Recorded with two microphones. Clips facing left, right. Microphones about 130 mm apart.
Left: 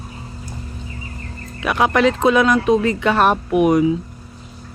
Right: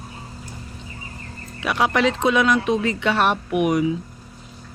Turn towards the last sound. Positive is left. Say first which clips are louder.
# left 5 dB
turn(degrees=35)  # may be behind; listen again after turning